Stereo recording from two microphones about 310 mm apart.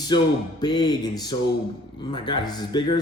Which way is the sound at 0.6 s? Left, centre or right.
Centre.